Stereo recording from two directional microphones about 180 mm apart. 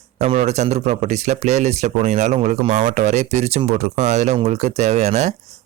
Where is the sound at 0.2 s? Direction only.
40° right (ahead or behind).